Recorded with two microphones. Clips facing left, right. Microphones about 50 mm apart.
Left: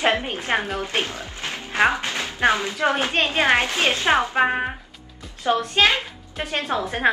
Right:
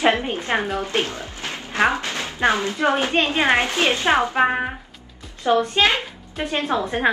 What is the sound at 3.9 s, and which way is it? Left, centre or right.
Speech, centre.